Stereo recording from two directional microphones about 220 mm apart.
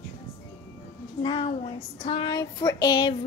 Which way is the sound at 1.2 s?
20° left (ahead or behind).